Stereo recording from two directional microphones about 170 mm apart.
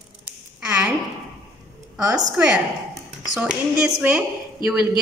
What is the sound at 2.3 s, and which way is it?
A woman's voice, 5° right (ahead or behind).